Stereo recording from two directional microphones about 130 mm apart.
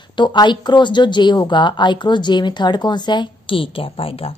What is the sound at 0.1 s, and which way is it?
A woman's voice, 35° left (ahead or behind).